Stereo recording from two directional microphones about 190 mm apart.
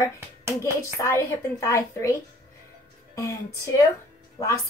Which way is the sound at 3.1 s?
15° left (ahead or behind).